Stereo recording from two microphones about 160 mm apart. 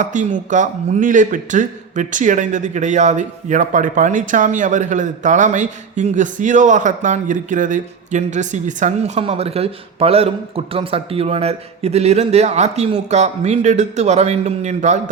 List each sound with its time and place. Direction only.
0.0 s a man's voice: 50° right (ahead or behind)